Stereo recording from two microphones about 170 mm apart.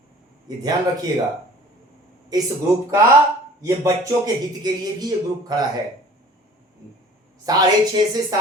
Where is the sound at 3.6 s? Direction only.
20° right (ahead or behind).